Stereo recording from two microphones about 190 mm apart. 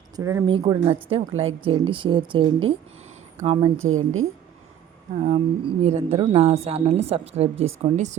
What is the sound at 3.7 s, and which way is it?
Speech, 90° right.